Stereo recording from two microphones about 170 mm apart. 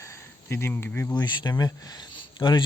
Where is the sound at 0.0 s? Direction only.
15° left (ahead or behind).